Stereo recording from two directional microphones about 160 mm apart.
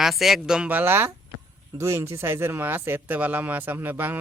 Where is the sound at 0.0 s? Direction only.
Centre (ahead or behind).